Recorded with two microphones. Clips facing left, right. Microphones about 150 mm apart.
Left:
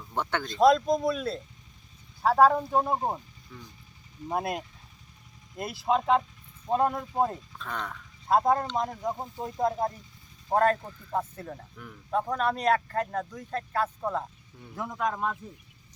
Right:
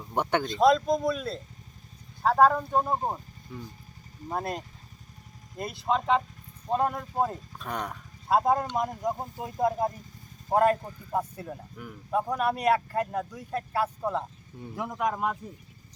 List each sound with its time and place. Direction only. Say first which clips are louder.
0.0 s speech: right 4 dB; 15° right (ahead or behind)
0.4 s speech: left 2 dB; centre (ahead or behind)
4.3 s speech: left 2 dB; 10° left (ahead or behind)
7.6 s speech: right 3 dB; 15° right (ahead or behind)